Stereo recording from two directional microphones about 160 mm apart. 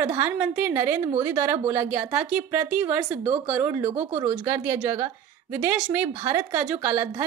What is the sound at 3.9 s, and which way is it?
Speech, 40° right (ahead or behind).